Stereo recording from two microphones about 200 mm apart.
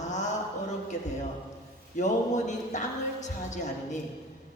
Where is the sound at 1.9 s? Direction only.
35° left (ahead or behind).